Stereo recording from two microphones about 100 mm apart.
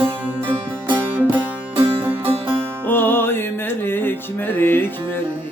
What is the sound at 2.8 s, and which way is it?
Music, 20° left (ahead or behind).